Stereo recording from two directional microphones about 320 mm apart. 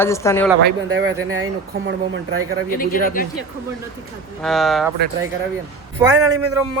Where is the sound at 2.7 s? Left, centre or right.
Left.